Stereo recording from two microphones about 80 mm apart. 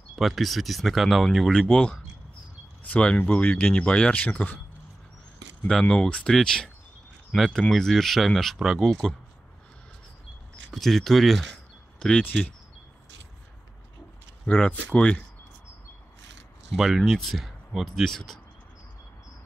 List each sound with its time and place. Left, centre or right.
0.1 s speech: centre
5.7 s speech: centre
10.7 s speech: centre
12.0 s speech: centre
14.4 s speech: centre
16.7 s speech: centre